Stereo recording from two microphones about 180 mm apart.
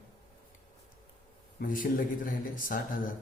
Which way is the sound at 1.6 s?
50° left (ahead or behind).